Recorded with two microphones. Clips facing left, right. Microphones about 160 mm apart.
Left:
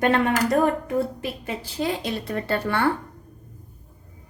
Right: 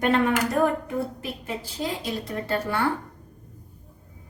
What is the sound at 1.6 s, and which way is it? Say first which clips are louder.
A woman's voice: left 6 dB; 65° left (ahead or behind).